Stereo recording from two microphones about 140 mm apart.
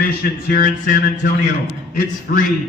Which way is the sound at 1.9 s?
90° left.